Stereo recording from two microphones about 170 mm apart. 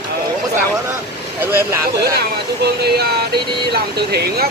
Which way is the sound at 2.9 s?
70° right (ahead or behind).